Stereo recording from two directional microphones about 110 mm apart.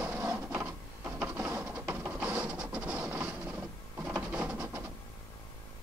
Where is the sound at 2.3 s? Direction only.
10° right (ahead or behind).